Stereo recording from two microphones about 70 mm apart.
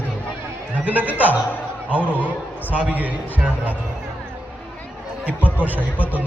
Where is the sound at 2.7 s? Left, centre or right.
Right.